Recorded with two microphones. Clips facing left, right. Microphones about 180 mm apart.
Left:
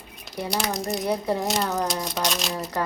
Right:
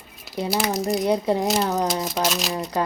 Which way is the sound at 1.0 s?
20° right (ahead or behind).